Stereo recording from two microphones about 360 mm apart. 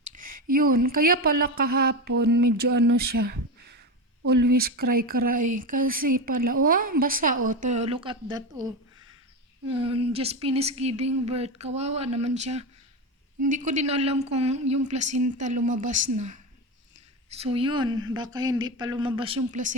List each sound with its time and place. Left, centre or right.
0.1 s a sound: right
0.5 s a woman's voice: right
17.4 s a woman's voice: centre